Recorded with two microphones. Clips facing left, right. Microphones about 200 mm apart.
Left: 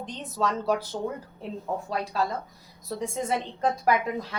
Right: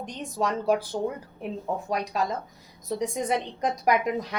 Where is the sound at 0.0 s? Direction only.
10° right (ahead or behind).